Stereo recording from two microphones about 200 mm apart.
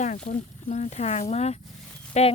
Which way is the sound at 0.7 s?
35° left (ahead or behind).